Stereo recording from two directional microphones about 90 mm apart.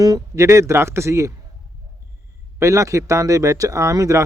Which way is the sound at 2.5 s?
35° right (ahead or behind).